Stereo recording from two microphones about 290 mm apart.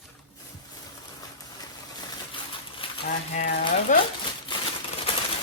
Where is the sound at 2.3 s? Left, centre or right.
Centre.